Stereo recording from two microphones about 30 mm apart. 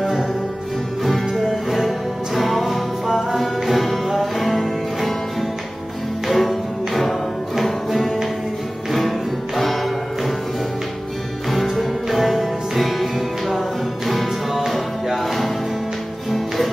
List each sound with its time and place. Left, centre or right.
1.1 s music: centre
6.2 s music: centre
11.7 s music: centre